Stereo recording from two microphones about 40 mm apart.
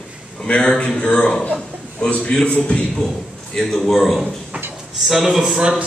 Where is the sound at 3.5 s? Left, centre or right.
Centre.